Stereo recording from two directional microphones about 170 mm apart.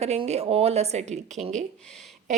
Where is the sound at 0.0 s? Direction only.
40° right (ahead or behind).